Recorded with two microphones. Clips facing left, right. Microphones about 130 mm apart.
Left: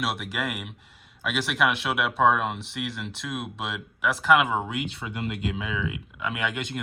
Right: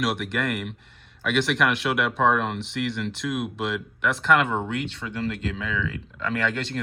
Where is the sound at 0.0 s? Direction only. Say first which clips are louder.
Right 4 dB; centre (ahead or behind).